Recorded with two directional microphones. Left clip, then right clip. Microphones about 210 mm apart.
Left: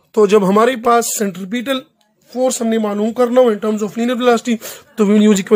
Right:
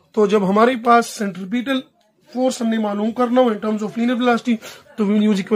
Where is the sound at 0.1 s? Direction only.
45° left (ahead or behind).